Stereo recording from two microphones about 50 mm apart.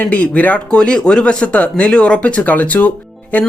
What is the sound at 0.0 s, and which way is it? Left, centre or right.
Speech, left.